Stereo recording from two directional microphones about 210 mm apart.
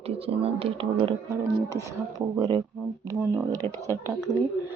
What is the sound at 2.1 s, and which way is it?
Speech, 20° right (ahead or behind).